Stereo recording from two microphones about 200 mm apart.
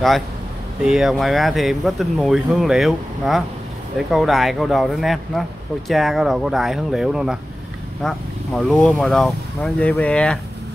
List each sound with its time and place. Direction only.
0.8 s speech: centre (ahead or behind)